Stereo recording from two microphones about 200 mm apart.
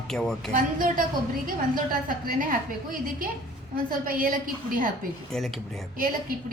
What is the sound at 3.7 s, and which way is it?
A woman's voice, 45° right (ahead or behind).